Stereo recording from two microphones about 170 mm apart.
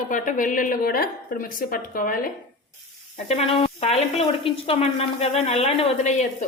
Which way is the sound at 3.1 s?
35° left (ahead or behind).